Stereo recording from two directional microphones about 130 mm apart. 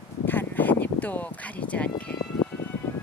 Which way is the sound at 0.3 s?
15° left (ahead or behind).